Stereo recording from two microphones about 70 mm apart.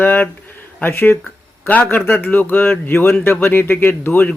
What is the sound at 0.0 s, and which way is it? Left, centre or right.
Speech, left.